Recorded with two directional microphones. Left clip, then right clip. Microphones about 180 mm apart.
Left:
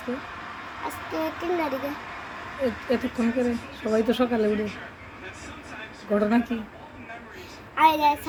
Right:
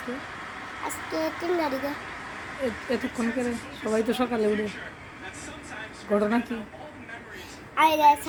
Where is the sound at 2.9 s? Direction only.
10° right (ahead or behind).